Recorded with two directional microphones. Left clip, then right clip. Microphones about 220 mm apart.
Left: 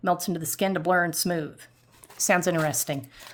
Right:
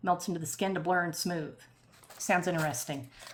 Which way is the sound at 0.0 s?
55° left (ahead or behind).